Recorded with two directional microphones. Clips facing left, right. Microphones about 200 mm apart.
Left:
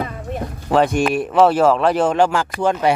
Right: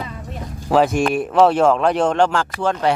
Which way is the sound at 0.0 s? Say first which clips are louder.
Left 5 dB; 55° left (ahead or behind).